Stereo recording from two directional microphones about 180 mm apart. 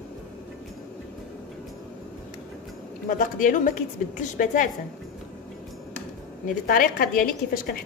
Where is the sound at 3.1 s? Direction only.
50° left (ahead or behind).